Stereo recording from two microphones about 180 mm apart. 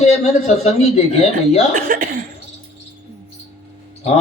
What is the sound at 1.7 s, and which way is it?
Speech, 50° right (ahead or behind).